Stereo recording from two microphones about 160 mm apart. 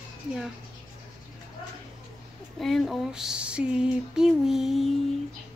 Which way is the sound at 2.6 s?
Centre (ahead or behind).